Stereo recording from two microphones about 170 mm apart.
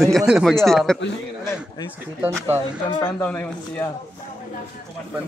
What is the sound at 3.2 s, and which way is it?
Speech, 10° left (ahead or behind).